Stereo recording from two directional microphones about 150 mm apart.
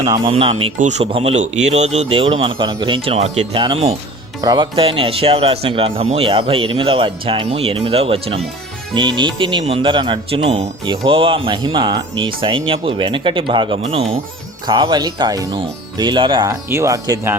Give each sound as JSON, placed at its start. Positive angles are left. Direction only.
{"t": 0.3, "sound": "speech", "side_deg": -40}
{"t": 0.8, "sound": "speech", "side_deg": -50}
{"t": 3.6, "sound": "speech", "side_deg": -30}
{"t": 13.8, "sound": "speech", "side_deg": -45}
{"t": 14.7, "sound": "speech", "side_deg": -30}
{"t": 16.5, "sound": "speech", "side_deg": -20}